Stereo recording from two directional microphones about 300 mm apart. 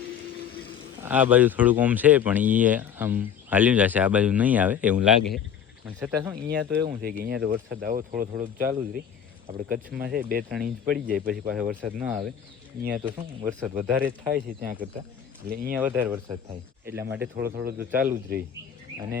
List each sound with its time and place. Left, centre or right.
1.0 s speech: centre
6.3 s speech: right
9.6 s speech: centre
10.0 s speech: right
10.5 s speech: centre
14.3 s speech: right
15.7 s speech: centre
16.5 s speech: right